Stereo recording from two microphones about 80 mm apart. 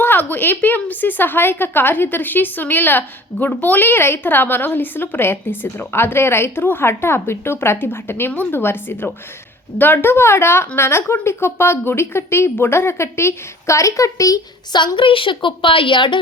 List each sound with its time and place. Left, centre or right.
0.0 s a woman's voice: left
14.9 s a woman's voice: left